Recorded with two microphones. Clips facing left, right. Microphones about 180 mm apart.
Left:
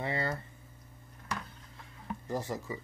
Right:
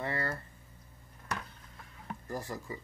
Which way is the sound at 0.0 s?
20° left (ahead or behind).